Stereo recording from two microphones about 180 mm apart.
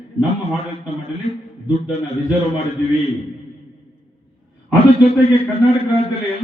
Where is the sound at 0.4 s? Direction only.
35° left (ahead or behind).